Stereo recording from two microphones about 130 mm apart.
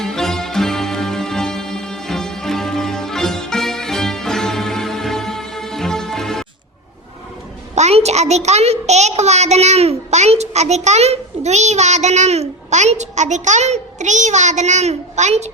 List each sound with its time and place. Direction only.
0.0 s music: 5° left (ahead or behind)
7.8 s a child's voice: 55° right (ahead or behind)